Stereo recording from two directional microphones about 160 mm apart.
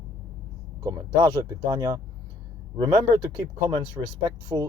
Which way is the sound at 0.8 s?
30° right (ahead or behind).